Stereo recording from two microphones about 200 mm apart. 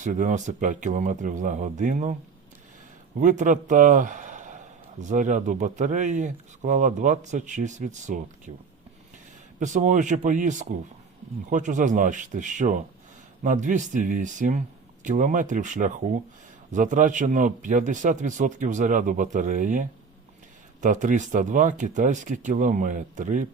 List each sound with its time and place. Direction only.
0.0 s a man's voice: 40° right (ahead or behind)
3.2 s a man's voice: 40° right (ahead or behind)
9.6 s a man's voice: 40° right (ahead or behind)